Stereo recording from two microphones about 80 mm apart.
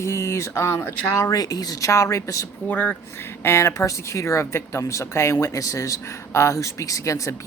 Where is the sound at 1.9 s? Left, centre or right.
Left.